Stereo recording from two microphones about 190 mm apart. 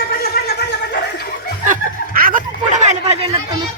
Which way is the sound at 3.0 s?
30° right (ahead or behind).